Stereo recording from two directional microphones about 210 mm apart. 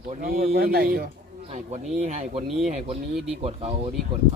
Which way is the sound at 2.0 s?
30° right (ahead or behind).